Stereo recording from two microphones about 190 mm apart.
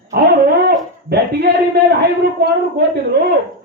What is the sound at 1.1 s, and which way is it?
Speech, 55° right (ahead or behind).